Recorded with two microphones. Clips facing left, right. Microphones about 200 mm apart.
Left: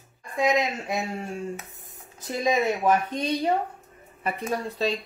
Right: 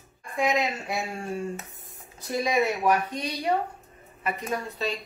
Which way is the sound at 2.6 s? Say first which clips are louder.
Left 1 dB; 25° left (ahead or behind).